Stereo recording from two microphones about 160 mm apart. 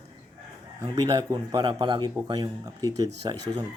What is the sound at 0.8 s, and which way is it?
Speech, 25° right (ahead or behind).